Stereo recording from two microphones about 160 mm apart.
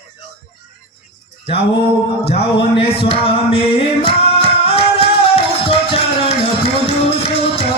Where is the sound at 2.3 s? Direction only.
35° left (ahead or behind).